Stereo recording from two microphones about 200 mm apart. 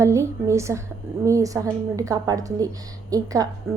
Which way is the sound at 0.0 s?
15° right (ahead or behind).